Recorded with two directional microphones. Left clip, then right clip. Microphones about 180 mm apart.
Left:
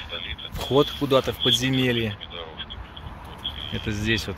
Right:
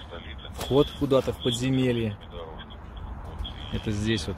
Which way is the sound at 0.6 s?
10° left (ahead or behind).